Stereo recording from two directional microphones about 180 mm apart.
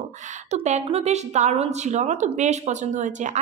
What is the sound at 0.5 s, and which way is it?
A woman's voice, 40° right (ahead or behind).